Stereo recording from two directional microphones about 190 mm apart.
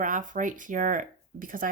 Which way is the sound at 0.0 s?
45° right (ahead or behind).